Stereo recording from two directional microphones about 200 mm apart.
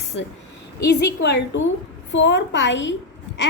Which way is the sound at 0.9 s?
60° left (ahead or behind).